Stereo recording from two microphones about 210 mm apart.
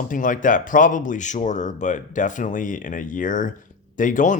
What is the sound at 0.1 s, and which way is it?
Speech, 40° left (ahead or behind).